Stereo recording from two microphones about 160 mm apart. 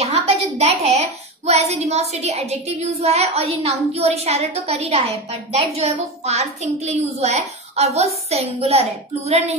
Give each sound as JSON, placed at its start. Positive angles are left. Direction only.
{"t": 0.0, "sound": "a woman's voice", "side_deg": -40}